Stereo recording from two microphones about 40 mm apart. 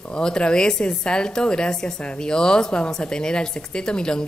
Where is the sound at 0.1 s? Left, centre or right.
Left.